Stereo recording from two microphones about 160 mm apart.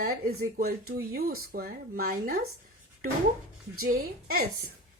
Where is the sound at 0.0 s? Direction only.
80° right.